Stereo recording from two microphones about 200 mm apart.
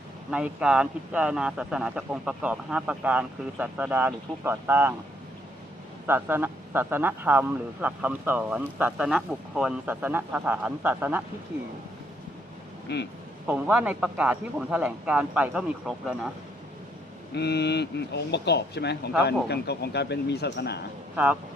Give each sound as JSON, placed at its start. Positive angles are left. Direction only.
{"t": 0.3, "sound": "speech", "side_deg": -5}
{"t": 6.1, "sound": "a man's voice", "side_deg": -10}
{"t": 12.9, "sound": "speech", "side_deg": 60}
{"t": 13.5, "sound": "speech", "side_deg": -5}
{"t": 17.3, "sound": "speech", "side_deg": 55}